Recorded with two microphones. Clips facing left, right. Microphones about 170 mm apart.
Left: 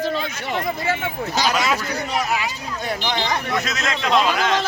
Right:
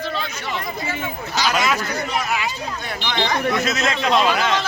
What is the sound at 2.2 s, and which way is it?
Speech, 35° left (ahead or behind).